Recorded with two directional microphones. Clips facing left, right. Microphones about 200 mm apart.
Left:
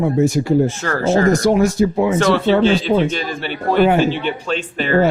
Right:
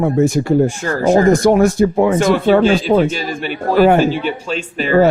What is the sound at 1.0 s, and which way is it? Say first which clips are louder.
A man's voice: right 3 dB; 55° right (ahead or behind).